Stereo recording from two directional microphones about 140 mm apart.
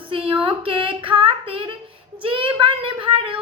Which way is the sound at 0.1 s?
40° right (ahead or behind).